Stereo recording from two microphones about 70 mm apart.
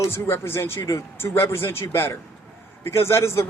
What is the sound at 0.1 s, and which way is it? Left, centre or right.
A man's voice, left.